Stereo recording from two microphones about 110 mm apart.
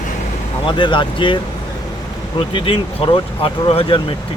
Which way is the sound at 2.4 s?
55° left (ahead or behind).